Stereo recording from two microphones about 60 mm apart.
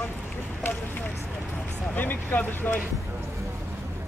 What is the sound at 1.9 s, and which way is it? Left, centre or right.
Speech, left.